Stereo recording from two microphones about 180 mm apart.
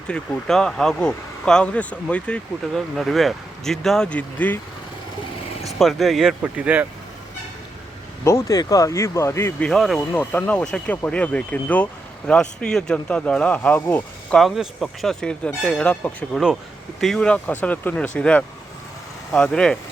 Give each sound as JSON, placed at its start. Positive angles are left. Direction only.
{"t": 0.1, "sound": "speech", "side_deg": 5}
{"t": 5.6, "sound": "speech", "side_deg": 0}
{"t": 8.2, "sound": "speech", "side_deg": 20}